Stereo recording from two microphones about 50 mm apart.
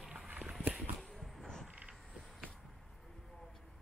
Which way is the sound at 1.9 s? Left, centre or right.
Centre.